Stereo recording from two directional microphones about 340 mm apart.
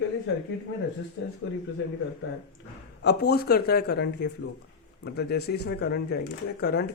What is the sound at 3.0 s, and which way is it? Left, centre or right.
Speech, left.